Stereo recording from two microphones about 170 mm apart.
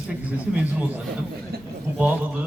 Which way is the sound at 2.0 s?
10° right (ahead or behind).